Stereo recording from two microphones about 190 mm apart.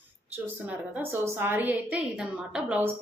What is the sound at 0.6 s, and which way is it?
A woman's voice, 10° right (ahead or behind).